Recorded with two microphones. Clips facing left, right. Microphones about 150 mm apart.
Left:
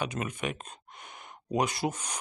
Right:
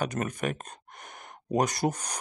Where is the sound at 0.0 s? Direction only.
45° right (ahead or behind).